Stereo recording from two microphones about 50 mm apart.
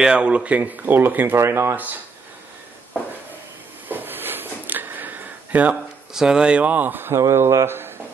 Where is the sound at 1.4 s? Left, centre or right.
Right.